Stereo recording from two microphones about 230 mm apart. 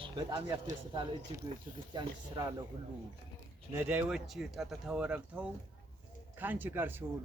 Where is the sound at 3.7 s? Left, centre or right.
Centre.